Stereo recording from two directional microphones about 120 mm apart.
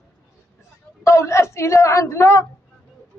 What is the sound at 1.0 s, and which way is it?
A woman's voice, 25° left (ahead or behind).